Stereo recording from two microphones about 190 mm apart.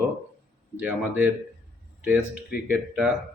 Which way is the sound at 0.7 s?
5° right (ahead or behind).